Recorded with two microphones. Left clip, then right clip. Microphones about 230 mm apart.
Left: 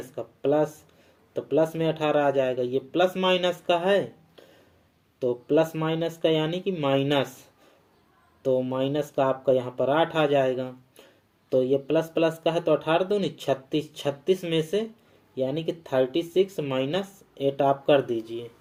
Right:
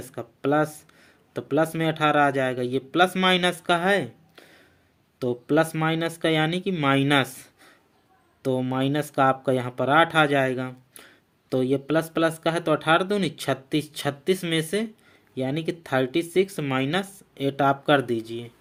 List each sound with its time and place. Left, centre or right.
0.2 s speech: right
8.4 s speech: right